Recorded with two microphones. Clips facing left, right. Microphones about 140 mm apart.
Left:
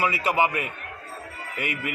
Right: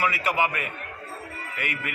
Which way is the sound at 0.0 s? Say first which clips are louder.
Left 2 dB; 25° left (ahead or behind).